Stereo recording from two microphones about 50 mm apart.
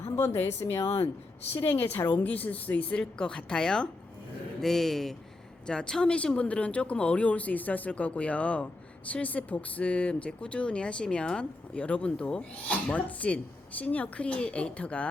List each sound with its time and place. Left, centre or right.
0.4 s speech: left
1.5 s a woman's voice: left
2.2 s speech: left
3.0 s speech: centre
5.6 s speech: centre